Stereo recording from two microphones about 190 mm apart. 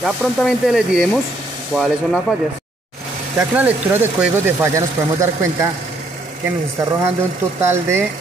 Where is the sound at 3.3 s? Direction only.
10° right (ahead or behind).